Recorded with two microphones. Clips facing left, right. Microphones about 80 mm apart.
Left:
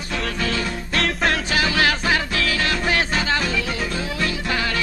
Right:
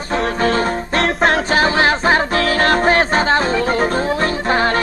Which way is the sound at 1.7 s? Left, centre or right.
Right.